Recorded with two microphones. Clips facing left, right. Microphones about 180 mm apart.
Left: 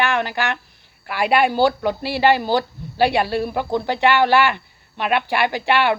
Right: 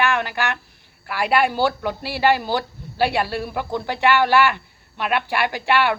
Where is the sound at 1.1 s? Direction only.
20° left (ahead or behind).